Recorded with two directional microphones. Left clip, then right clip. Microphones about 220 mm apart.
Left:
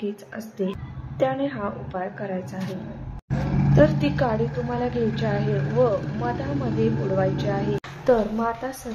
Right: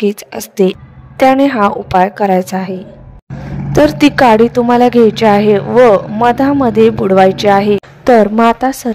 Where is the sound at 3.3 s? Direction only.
Centre (ahead or behind).